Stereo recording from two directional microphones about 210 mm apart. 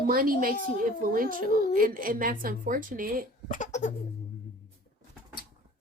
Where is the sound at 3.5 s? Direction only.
35° left (ahead or behind).